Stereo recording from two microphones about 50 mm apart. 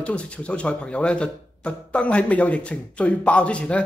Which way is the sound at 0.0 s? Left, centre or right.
Left.